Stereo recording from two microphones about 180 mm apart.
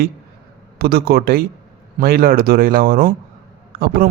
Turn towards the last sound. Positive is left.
turn(degrees=-55)  # may be behind; listen again after turning